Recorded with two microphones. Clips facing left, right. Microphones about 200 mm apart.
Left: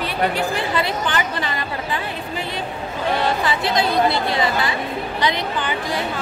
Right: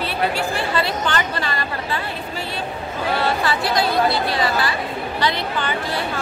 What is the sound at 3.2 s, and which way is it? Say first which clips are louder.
A woman's voice: even; 20° left (ahead or behind).